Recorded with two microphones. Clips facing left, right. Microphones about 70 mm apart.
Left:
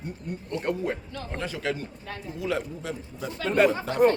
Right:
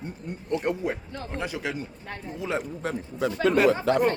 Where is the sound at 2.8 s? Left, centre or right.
Right.